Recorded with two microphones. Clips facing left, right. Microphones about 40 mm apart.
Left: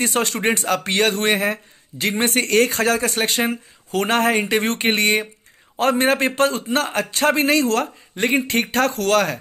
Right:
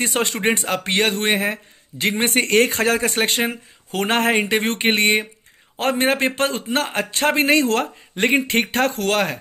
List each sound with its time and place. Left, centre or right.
0.0 s a man's voice: centre